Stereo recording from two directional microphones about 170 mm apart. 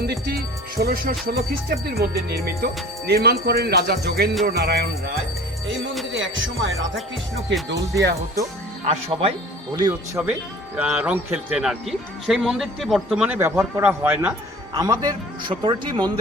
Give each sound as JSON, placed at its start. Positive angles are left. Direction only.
{"t": 0.0, "sound": "music", "side_deg": -65}
{"t": 3.1, "sound": "speech", "side_deg": -70}
{"t": 6.1, "sound": "music", "side_deg": -90}
{"t": 8.9, "sound": "speech", "side_deg": -35}
{"t": 9.7, "sound": "speech", "side_deg": -25}
{"t": 10.8, "sound": "speech", "side_deg": -10}
{"t": 14.7, "sound": "speech", "side_deg": -20}